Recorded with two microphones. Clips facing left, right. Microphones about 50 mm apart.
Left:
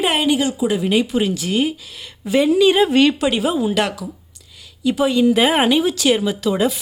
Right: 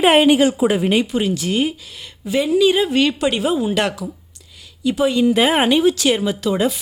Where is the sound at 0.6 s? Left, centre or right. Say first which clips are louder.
Right 2 dB; right.